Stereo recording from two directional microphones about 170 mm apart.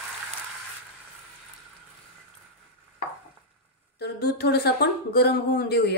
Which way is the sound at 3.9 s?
75° left (ahead or behind).